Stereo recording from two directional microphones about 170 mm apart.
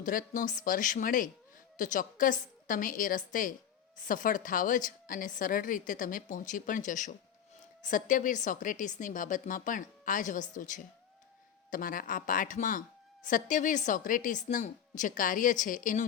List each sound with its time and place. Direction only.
0.0 s a woman's voice: 50° left (ahead or behind)